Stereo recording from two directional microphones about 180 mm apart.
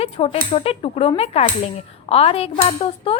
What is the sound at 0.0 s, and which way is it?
A woman's voice, 30° left (ahead or behind).